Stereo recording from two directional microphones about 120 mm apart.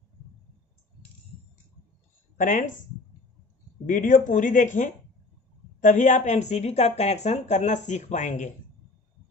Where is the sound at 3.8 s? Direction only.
90° left.